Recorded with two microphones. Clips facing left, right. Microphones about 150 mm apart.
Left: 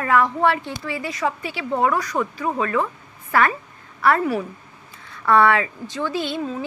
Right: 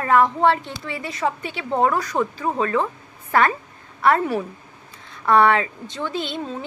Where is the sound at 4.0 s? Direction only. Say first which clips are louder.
Even; 25° right (ahead or behind).